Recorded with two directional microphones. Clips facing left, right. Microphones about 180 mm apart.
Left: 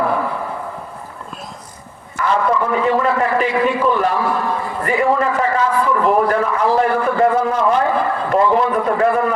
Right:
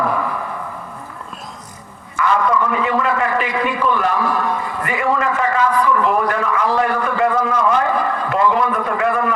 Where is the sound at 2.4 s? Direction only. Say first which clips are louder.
Left 2 dB; 30° left (ahead or behind).